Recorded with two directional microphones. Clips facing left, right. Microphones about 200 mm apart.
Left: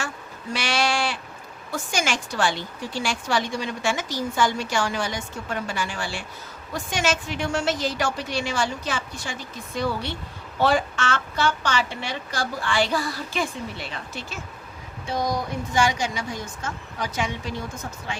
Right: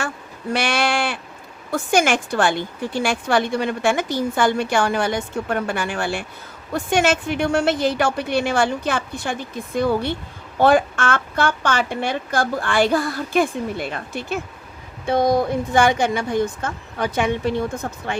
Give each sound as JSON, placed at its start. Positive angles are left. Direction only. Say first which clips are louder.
{"t": 0.5, "sound": "a woman's voice", "louder": "right 4 dB", "side_deg": -55}